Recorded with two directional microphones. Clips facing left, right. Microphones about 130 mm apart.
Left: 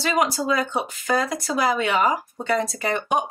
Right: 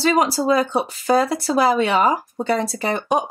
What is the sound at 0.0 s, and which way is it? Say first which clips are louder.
Speech: right 4 dB; 30° right (ahead or behind).